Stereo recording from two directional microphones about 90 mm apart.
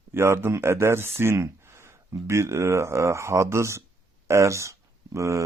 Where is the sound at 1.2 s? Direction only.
30° right (ahead or behind).